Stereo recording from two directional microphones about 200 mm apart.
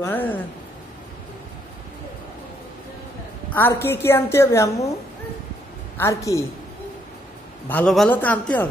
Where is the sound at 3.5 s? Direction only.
10° left (ahead or behind).